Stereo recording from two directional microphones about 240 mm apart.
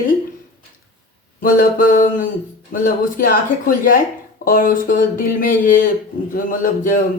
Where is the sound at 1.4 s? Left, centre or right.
Left.